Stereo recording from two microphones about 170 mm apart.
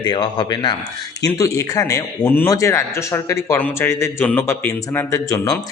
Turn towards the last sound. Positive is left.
turn(degrees=20)  # may be behind; listen again after turning